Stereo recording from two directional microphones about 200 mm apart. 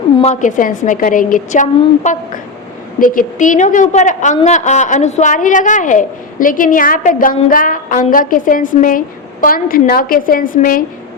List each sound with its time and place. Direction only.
0.2 s a woman's voice: 35° left (ahead or behind)